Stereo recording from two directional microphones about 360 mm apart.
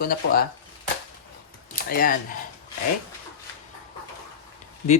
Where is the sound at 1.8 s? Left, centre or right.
Left.